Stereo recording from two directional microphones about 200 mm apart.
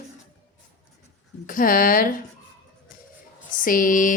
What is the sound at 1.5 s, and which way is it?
Music, 45° left (ahead or behind).